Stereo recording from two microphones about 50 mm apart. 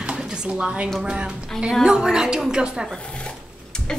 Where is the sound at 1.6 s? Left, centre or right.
Centre.